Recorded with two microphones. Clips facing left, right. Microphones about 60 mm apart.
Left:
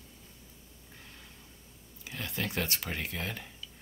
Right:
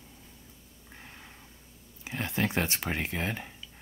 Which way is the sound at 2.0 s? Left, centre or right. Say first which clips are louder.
Right 6 dB; right.